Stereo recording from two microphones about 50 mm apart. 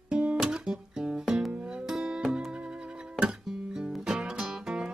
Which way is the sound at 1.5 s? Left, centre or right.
Centre.